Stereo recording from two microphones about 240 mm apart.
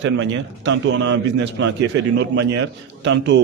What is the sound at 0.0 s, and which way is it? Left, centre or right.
A man's voice, right.